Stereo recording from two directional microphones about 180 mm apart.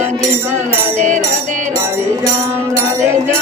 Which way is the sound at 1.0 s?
45° right (ahead or behind).